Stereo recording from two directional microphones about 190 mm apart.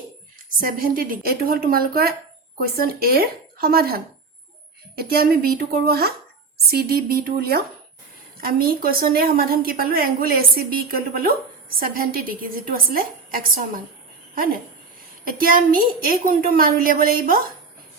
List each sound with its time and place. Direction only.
0.6 s a woman's voice: 50° right (ahead or behind)
15.2 s a woman's voice: 50° right (ahead or behind)